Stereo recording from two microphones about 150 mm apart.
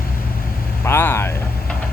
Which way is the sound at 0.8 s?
15° left (ahead or behind).